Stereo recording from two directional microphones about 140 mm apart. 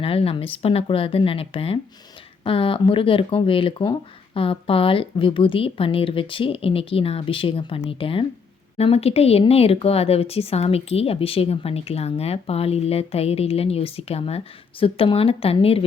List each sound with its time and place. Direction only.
0.0 s a woman's voice: 45° left (ahead or behind)